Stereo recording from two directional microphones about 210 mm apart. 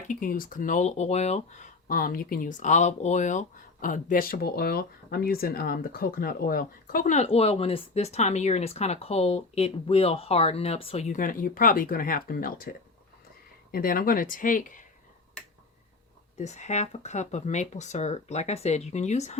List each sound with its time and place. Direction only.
0.1 s speech: 40° left (ahead or behind)
16.4 s speech: 35° left (ahead or behind)